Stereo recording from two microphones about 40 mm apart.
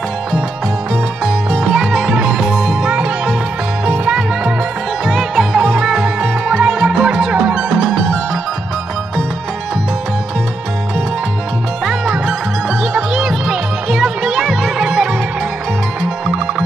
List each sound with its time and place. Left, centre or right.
1.2 s music: centre
3.8 s music: right
5.0 s music: centre
5.6 s music: right
7.7 s music: centre
12.9 s music: right